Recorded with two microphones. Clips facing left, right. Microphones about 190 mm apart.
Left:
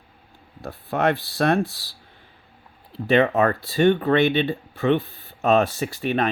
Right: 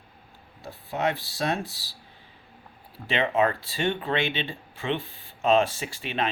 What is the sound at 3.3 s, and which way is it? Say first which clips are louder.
Speech: left 4 dB; 45° left (ahead or behind).